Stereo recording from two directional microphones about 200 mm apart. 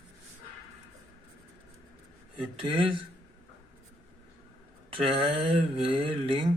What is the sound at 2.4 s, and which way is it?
Speech, 25° right (ahead or behind).